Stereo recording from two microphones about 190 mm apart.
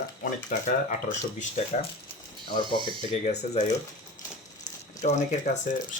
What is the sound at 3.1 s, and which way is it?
Speech, 35° left (ahead or behind).